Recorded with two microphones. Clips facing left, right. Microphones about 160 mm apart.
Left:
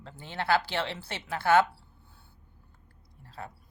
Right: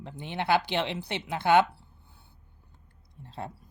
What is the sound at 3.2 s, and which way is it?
Speech, 25° right (ahead or behind).